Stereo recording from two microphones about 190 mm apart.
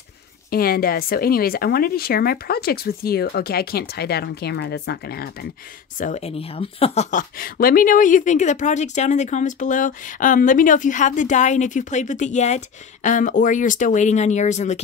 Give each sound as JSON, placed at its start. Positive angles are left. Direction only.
{"t": 0.5, "sound": "speech", "side_deg": 50}
{"t": 5.9, "sound": "a woman's voice", "side_deg": 40}